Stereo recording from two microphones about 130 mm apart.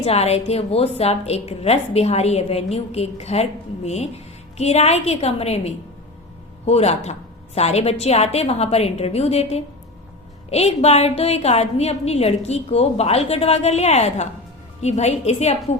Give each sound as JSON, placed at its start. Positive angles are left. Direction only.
{"t": 0.0, "sound": "a woman's voice", "side_deg": 50}